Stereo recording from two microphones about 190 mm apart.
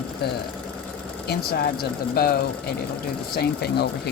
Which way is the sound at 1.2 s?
55° left (ahead or behind).